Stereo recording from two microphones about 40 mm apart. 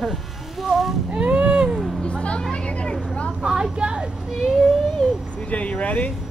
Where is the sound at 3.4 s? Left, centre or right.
Centre.